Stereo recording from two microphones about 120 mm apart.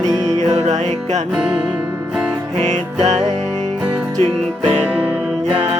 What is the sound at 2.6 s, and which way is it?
Music, 70° right (ahead or behind).